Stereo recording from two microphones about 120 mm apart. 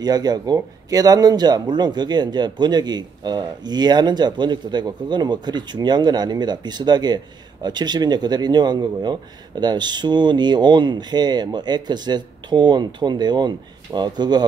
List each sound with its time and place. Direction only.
0.0 s a man's voice: 35° right (ahead or behind)